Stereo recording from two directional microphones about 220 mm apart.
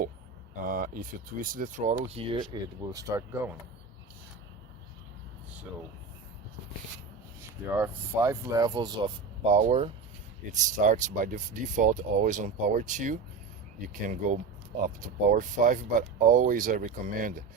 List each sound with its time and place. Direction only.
0.6 s speech: 40° right (ahead or behind); by 3.5 s 15° right (ahead or behind)
7.7 s speech: 10° right (ahead or behind)
9.5 s speech: 30° right (ahead or behind)